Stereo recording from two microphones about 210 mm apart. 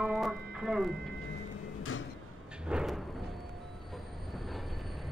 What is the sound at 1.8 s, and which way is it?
Sliding door, 75° left (ahead or behind).